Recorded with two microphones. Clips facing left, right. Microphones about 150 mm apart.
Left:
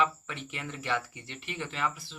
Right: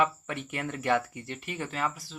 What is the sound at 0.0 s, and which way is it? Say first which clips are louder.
Speech: right 2 dB; 50° right (ahead or behind).